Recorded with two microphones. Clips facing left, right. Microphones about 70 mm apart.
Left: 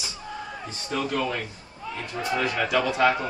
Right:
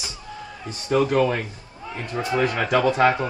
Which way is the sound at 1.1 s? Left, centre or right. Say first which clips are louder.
Right 7 dB; right.